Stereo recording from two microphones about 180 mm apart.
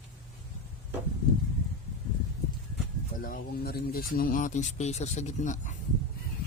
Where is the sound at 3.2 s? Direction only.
55° left (ahead or behind).